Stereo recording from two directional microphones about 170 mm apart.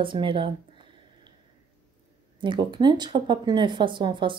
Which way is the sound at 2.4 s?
30° right (ahead or behind).